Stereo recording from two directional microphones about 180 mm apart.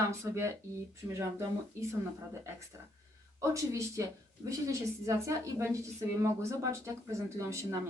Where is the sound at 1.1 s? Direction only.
15° right (ahead or behind).